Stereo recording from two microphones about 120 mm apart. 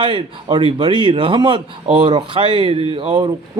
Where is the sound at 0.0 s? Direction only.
45° right (ahead or behind).